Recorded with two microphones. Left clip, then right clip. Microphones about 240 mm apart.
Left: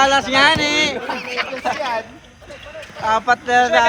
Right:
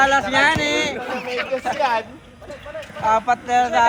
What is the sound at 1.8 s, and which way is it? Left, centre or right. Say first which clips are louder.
Speech: right 3 dB; right.